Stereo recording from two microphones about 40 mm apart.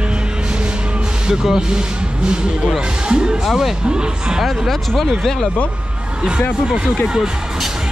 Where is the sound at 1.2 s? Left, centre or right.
Centre.